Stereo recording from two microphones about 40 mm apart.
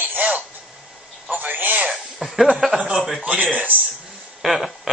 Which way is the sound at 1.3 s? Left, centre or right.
Right.